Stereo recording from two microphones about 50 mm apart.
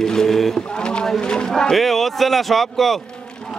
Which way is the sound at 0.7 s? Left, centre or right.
Centre.